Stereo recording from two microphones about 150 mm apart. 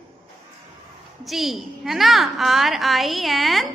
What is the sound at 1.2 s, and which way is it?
A woman's voice, centre (ahead or behind).